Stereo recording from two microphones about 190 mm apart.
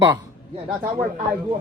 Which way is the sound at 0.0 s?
20° right (ahead or behind).